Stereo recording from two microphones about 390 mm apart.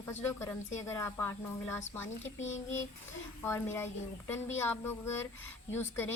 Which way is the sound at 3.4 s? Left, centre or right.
Centre.